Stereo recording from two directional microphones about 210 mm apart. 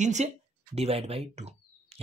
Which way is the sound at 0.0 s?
35° right (ahead or behind).